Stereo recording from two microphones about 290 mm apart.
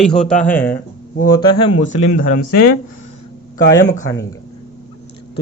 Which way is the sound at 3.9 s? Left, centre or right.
Centre.